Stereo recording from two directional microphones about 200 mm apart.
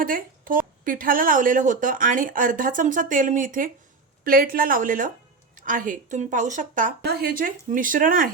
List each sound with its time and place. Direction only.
0.0 s a woman's voice: 45° right (ahead or behind)